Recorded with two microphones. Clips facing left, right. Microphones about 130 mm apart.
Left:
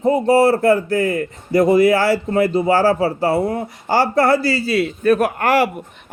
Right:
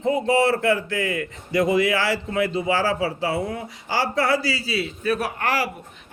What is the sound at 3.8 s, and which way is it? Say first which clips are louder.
A man's voice: left 7 dB; 50° left (ahead or behind).